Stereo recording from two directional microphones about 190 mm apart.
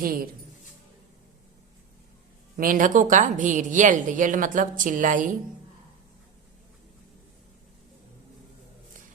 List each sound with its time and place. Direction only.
0.0 s speech: 50° right (ahead or behind)
2.6 s speech: 45° right (ahead or behind)